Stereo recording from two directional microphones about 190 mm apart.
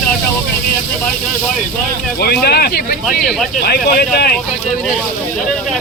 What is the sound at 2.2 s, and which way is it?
Speech, 55° left (ahead or behind).